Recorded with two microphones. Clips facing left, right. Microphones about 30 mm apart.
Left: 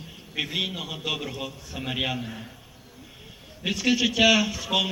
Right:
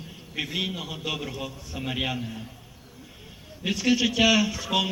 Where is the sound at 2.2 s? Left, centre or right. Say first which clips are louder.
Even; left.